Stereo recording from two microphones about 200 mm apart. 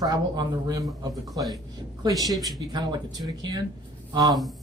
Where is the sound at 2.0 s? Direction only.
15° right (ahead or behind).